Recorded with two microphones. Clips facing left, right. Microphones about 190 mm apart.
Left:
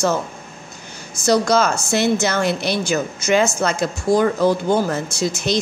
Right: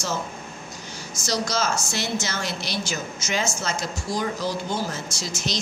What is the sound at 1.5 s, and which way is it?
Speech, 60° left (ahead or behind).